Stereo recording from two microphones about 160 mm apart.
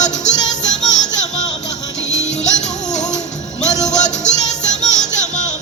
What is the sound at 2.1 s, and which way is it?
Music, 45° left (ahead or behind).